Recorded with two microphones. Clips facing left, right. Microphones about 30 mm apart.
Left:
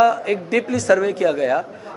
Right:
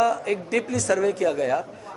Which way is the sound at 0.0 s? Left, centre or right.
Left.